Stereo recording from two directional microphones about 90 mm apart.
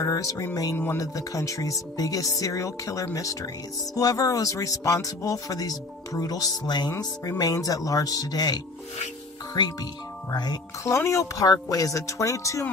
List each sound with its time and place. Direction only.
0.0 s speech: 40° left (ahead or behind)
9.6 s speech: 55° left (ahead or behind)
10.8 s speech: 35° left (ahead or behind)